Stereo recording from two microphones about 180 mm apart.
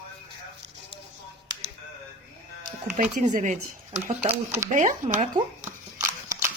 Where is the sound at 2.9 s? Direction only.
40° right (ahead or behind).